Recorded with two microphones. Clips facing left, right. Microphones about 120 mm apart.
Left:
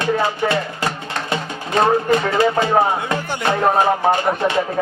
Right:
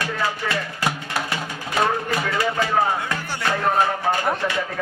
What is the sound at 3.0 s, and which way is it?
Music, 25° left (ahead or behind).